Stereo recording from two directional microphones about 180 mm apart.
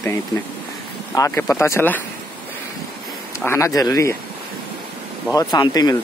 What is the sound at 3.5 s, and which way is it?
Speech, 15° left (ahead or behind).